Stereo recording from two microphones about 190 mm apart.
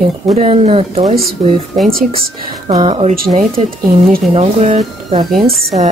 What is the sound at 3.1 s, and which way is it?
Speech, 45° right (ahead or behind).